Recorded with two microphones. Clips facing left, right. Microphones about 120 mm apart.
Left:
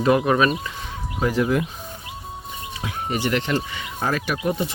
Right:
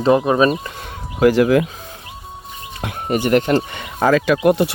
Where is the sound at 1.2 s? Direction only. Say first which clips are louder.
Right 8 dB; 85° right.